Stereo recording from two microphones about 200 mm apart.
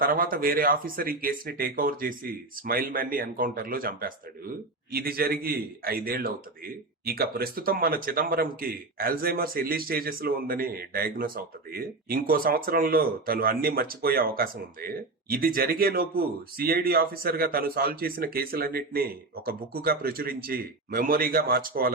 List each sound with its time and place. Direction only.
0.0 s speech: 45° right (ahead or behind)